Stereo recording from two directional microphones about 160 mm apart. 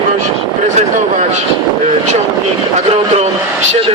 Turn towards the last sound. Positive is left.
turn(degrees=-40)  # may be behind; listen again after turning